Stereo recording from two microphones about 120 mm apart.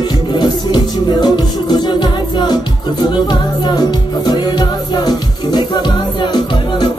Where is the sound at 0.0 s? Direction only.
40° left (ahead or behind).